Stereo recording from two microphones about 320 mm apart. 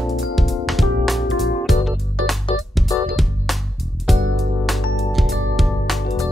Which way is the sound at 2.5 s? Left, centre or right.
Centre.